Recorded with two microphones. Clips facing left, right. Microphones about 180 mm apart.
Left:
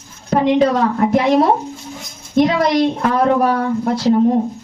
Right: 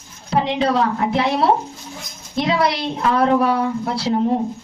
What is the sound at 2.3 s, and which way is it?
Speech, 45° left (ahead or behind).